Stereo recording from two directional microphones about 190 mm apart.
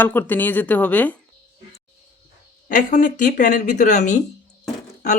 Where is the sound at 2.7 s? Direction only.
40° left (ahead or behind).